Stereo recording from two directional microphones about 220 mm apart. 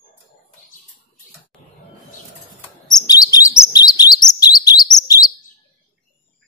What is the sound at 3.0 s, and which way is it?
Chirp, 15° left (ahead or behind).